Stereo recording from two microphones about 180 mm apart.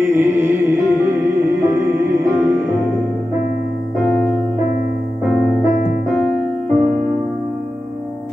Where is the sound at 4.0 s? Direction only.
5° left (ahead or behind).